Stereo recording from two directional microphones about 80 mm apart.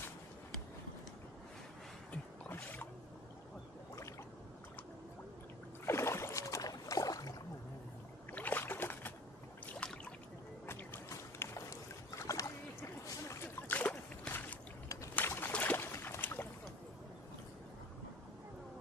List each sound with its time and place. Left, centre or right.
2.4 s boat: left
5.9 s boat: left
8.3 s boat: left
9.8 s a sound: centre
10.7 s boat: left
11.1 s boat: left
13.7 s boat: centre